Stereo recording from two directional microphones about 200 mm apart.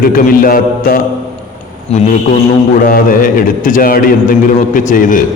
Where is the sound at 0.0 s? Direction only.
45° left (ahead or behind).